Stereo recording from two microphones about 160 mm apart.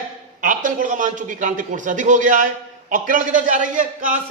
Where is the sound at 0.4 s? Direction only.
55° right (ahead or behind).